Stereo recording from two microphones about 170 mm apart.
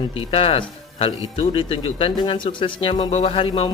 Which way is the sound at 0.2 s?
35° left (ahead or behind).